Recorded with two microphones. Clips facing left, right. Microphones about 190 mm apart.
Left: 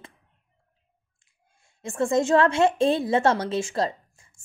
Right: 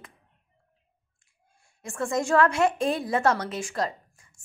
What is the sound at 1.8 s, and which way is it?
A woman's voice, 25° left (ahead or behind).